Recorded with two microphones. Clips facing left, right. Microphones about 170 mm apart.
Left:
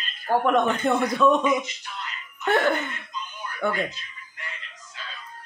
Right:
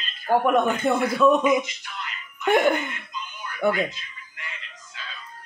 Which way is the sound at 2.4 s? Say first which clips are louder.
Right 2 dB; 15° right (ahead or behind).